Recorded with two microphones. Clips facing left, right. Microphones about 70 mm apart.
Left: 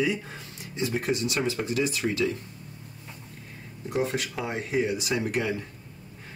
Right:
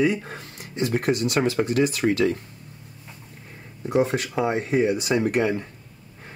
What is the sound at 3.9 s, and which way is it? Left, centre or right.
Speech, right.